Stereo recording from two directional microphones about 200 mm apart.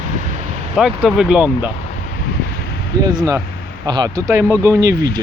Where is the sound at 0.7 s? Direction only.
Centre (ahead or behind).